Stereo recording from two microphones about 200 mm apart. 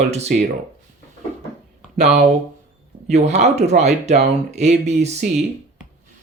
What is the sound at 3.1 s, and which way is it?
Speech, 35° right (ahead or behind).